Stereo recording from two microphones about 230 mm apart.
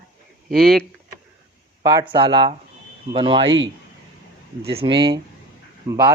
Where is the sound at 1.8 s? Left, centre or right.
Centre.